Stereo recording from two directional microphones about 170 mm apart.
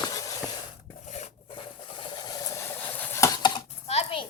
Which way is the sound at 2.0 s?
25° left (ahead or behind).